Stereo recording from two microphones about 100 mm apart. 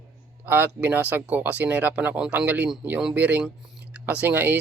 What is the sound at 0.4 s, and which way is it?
Speech, 20° right (ahead or behind).